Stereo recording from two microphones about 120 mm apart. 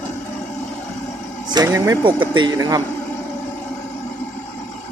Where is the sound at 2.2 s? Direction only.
40° right (ahead or behind).